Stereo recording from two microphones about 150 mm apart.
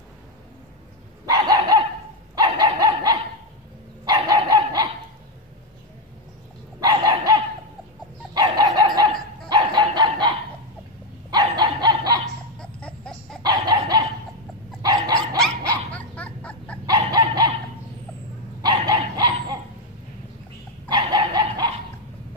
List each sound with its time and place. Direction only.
1.2 s dog: 25° right (ahead or behind)
6.8 s dog: 25° right (ahead or behind)
8.5 s dog: 25° right (ahead or behind)
12.5 s a sound: 5° left (ahead or behind)
13.4 s dog: 25° right (ahead or behind)
15.9 s a sound: 10° left (ahead or behind)
16.8 s dog: 25° right (ahead or behind)
18.6 s dog: 25° right (ahead or behind)
20.9 s dog: 30° right (ahead or behind)